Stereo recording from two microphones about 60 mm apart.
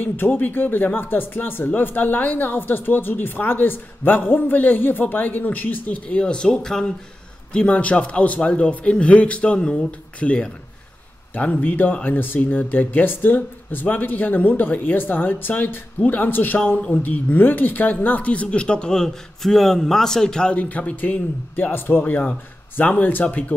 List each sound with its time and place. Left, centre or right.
0.0 s speech: left
6.0 s speech: centre
7.5 s speech: left
20.6 s speech: left